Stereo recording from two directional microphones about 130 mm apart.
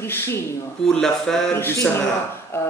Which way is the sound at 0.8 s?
5° left (ahead or behind).